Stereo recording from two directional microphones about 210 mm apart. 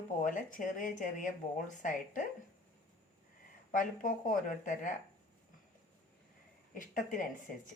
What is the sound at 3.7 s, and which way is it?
Speech, 40° left (ahead or behind).